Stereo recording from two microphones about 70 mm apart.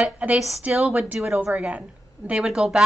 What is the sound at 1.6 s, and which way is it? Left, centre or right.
A woman's voice, centre.